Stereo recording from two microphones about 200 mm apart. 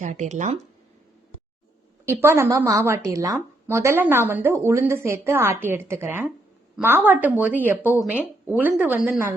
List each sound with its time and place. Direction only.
0.0 s speech: 35° right (ahead or behind)
2.0 s a woman's voice: 10° right (ahead or behind)